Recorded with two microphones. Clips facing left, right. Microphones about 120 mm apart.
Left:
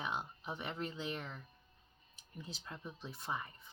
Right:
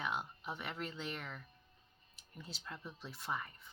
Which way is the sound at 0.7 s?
20° left (ahead or behind).